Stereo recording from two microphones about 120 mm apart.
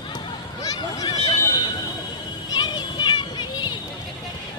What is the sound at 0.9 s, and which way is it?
Horse, 30° left (ahead or behind).